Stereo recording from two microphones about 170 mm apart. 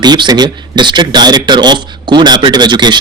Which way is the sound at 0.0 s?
25° right (ahead or behind).